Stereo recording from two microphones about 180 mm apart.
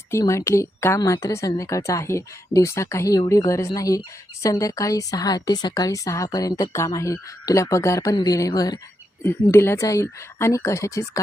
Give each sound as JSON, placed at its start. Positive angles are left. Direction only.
{"t": 0.1, "sound": "a woman's voice", "side_deg": 15}